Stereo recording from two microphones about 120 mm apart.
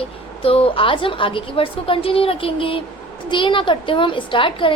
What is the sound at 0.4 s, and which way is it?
A woman's voice, 50° left (ahead or behind).